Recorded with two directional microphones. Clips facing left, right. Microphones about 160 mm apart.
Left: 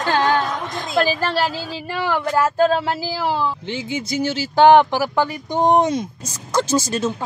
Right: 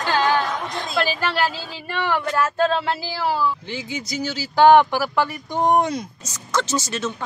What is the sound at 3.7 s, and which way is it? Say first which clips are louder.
Speech: left 4 dB; 25° left (ahead or behind).